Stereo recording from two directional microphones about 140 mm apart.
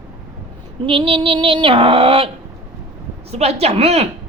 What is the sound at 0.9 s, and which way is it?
Child singing, 40° right (ahead or behind).